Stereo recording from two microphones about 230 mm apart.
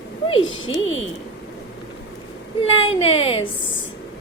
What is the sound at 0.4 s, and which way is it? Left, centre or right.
Speech, left.